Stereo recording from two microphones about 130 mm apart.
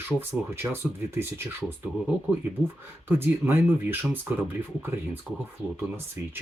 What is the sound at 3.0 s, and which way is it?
Speech, 15° right (ahead or behind).